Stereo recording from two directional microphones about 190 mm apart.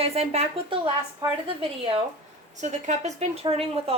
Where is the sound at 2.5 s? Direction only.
40° right (ahead or behind).